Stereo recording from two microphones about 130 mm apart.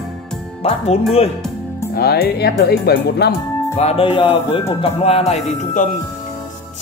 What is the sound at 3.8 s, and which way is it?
Speech, 50° left (ahead or behind).